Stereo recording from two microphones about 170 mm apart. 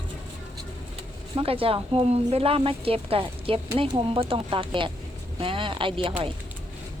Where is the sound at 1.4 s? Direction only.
35° right (ahead or behind).